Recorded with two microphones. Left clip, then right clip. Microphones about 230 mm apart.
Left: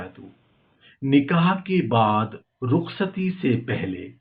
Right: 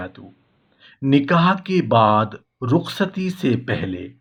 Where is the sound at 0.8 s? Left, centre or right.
Right.